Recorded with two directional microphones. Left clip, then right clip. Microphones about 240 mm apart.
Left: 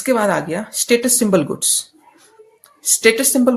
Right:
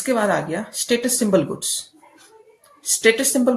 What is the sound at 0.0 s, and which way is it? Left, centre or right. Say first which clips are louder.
Speech: left 3 dB; left.